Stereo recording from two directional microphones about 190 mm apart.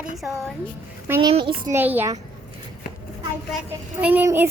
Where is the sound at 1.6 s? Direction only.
10° right (ahead or behind).